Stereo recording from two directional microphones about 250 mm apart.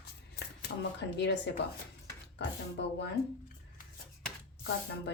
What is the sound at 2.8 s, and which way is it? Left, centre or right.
Speech, left.